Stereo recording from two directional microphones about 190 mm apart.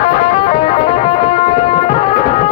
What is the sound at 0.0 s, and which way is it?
Music, 30° left (ahead or behind).